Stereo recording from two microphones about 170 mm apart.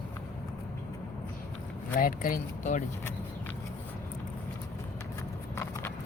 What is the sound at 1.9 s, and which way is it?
Speech, 55° left (ahead or behind).